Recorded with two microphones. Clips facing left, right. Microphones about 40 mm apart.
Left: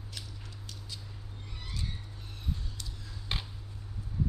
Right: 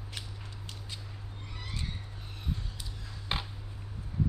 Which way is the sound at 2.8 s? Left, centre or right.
Centre.